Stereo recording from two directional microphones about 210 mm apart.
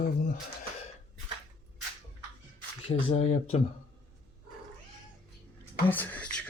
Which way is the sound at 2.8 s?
25° left (ahead or behind).